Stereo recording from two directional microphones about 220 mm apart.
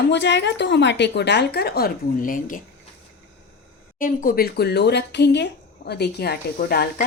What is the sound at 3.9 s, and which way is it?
Speech, 40° left (ahead or behind).